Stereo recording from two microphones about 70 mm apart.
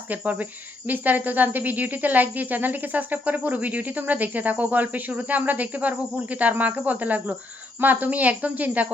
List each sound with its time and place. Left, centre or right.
0.1 s a woman's voice: right